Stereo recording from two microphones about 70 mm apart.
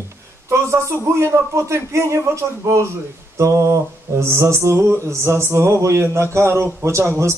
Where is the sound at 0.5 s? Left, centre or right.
Right.